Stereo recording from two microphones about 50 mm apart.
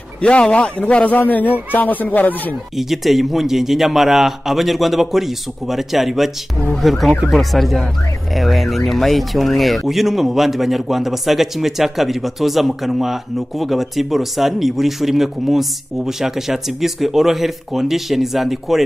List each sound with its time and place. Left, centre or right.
0.2 s a man's voice: left
2.8 s speech: centre